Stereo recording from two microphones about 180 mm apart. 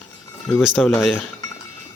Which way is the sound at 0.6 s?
Centre (ahead or behind).